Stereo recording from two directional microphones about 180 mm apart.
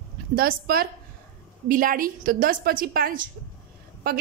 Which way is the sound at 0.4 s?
55° right (ahead or behind).